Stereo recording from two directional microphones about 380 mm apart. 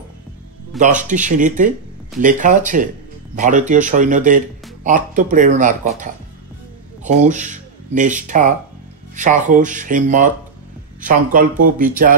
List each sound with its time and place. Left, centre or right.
0.7 s speech: centre